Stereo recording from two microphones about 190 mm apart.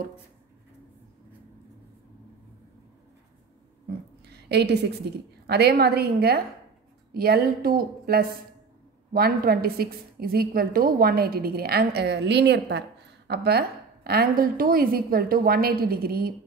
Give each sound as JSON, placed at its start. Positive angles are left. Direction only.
{"t": 4.3, "sound": "a woman's voice", "side_deg": -60}